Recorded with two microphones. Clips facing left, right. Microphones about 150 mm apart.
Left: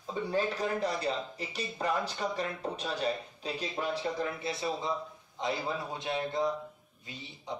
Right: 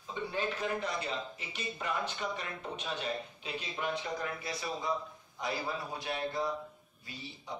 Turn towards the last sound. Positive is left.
turn(degrees=20)  # may be behind; listen again after turning